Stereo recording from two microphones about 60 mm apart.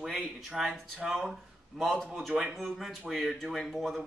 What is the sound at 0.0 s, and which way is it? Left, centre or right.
Speech, centre.